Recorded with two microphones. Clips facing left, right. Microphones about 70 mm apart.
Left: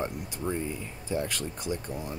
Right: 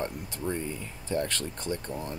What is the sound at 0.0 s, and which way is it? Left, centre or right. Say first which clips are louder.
Speech: left 1 dB; centre.